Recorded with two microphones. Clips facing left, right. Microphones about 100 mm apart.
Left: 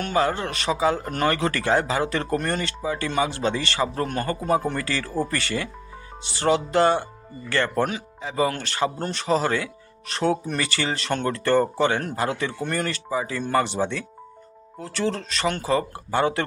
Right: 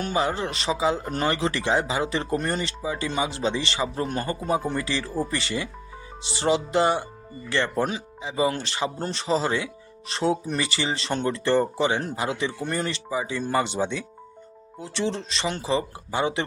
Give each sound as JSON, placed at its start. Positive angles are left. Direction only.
{"t": 0.0, "sound": "speech", "side_deg": -20}